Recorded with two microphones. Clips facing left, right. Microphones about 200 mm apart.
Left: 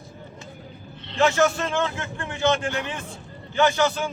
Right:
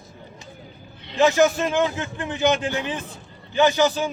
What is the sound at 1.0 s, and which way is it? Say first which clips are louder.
A man's voice: right 3 dB; 15° right (ahead or behind).